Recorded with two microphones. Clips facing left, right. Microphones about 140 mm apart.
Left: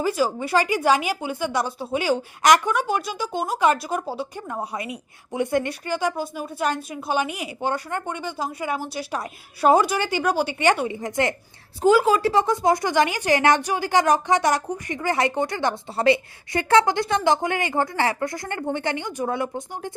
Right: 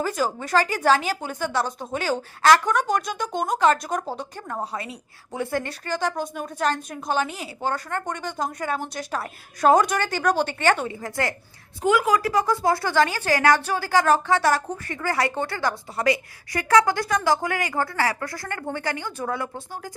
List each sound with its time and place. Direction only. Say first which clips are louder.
0.2 s a woman's voice: left 1 dB; 10° left (ahead or behind)
11.8 s speech: left 3 dB; 30° left (ahead or behind)